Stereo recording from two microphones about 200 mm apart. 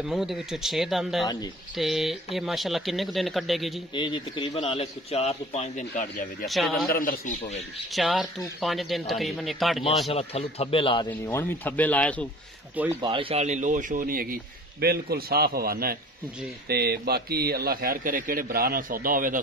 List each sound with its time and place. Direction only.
0.0 s speech: centre (ahead or behind)
1.2 s speech: 20° left (ahead or behind)
1.8 s speech: centre (ahead or behind)
3.9 s a man's voice: 25° left (ahead or behind)
6.4 s speech: centre (ahead or behind)
6.9 s a man's voice: 45° left (ahead or behind)
7.9 s speech: centre (ahead or behind)
10.1 s speech: 30° left (ahead or behind)
11.1 s speech: 10° left (ahead or behind)
13.0 s speech: 25° right (ahead or behind); by 19.4 s 45° right (ahead or behind)